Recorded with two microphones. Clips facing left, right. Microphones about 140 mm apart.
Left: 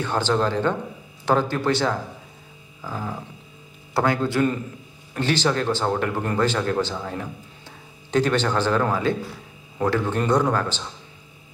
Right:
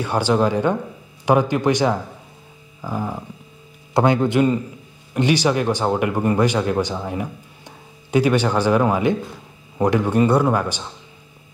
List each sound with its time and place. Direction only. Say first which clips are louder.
0.0 s speech: right 4 dB; 10° right (ahead or behind)